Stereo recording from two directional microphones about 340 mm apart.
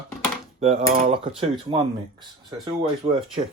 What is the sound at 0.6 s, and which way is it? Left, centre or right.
Speech, centre.